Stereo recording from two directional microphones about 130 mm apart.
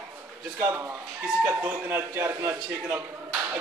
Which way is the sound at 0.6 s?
20° right (ahead or behind).